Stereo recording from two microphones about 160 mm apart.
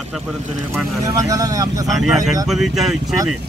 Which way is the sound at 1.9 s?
Centre (ahead or behind).